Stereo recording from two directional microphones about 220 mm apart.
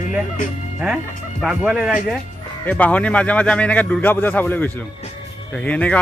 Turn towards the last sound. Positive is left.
turn(degrees=5)  # may be behind; listen again after turning